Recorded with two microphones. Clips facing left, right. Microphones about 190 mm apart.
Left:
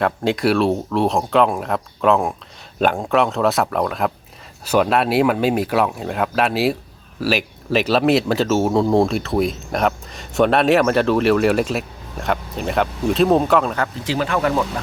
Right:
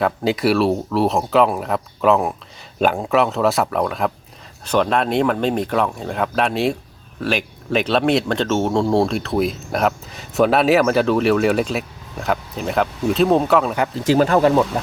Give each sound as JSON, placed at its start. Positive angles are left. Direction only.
{"t": 0.0, "sound": "speech", "side_deg": 0}
{"t": 14.0, "sound": "speech", "side_deg": -45}